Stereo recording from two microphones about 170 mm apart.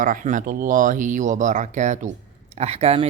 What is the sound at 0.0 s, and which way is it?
Speech, 50° right (ahead or behind).